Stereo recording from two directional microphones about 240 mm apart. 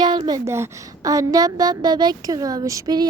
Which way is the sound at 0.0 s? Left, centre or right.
Centre.